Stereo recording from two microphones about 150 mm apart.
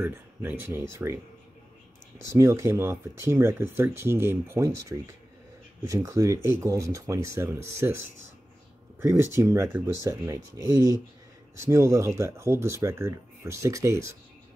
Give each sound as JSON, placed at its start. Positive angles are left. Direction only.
{"t": 0.0, "sound": "speech", "side_deg": -15}
{"t": 2.3, "sound": "speech", "side_deg": -20}
{"t": 11.5, "sound": "speech", "side_deg": -20}